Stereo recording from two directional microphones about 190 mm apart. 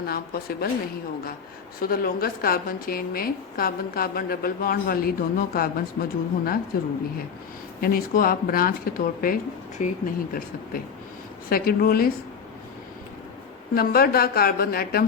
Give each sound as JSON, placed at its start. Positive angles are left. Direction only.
{"t": 0.0, "sound": "speech", "side_deg": 55}
{"t": 1.8, "sound": "a woman's voice", "side_deg": 50}
{"t": 7.8, "sound": "a woman's voice", "side_deg": 50}
{"t": 11.4, "sound": "a woman's voice", "side_deg": 50}
{"t": 13.7, "sound": "a woman's voice", "side_deg": 50}